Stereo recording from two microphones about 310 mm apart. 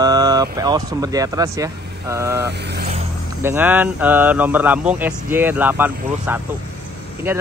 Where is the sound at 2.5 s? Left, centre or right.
Right.